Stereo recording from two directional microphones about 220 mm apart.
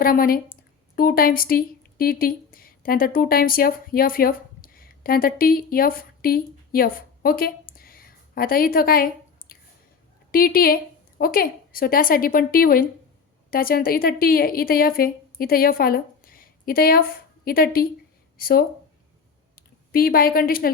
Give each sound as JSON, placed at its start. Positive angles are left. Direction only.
{"t": 0.0, "sound": "speech", "side_deg": 40}
{"t": 7.7, "sound": "a sound", "side_deg": 40}
{"t": 10.3, "sound": "a woman's voice", "side_deg": 40}